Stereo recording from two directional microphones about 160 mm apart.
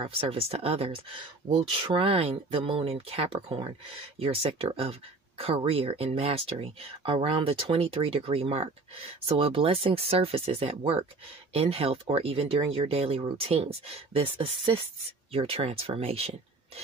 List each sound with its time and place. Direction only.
0.0 s speech: 35° right (ahead or behind)